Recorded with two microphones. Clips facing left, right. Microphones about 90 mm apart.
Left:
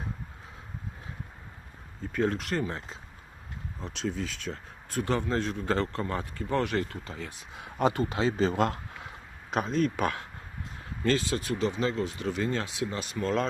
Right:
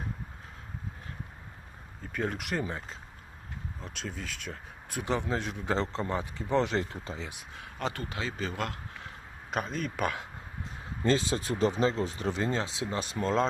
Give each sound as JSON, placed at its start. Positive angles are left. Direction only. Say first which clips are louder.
{"t": 2.1, "sound": "speech", "louder": "left 4 dB", "side_deg": -10}
{"t": 3.8, "sound": "speech", "louder": "left 8 dB", "side_deg": 0}
{"t": 7.5, "sound": "a man's voice", "louder": "left 9 dB", "side_deg": 20}
{"t": 9.5, "sound": "speech", "louder": "left 6 dB", "side_deg": 0}
{"t": 11.0, "sound": "speech", "louder": "even", "side_deg": -25}